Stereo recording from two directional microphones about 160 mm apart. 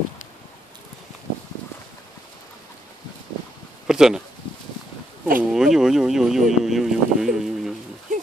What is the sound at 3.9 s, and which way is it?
Speech, 5° right (ahead or behind).